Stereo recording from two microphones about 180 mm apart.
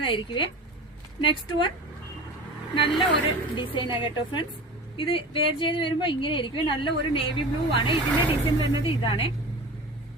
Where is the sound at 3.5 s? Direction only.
25° left (ahead or behind).